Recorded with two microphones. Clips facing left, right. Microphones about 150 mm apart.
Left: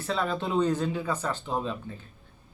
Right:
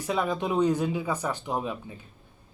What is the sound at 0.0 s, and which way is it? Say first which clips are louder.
Speech: right 2 dB; 15° right (ahead or behind).